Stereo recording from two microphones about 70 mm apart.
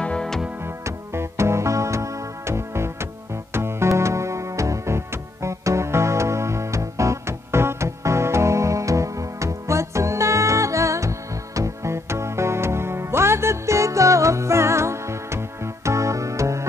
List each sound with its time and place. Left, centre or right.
0.0 s music: centre
0.7 s music: right